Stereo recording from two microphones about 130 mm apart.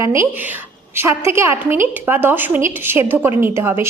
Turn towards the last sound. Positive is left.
turn(degrees=-15)  # may be behind; listen again after turning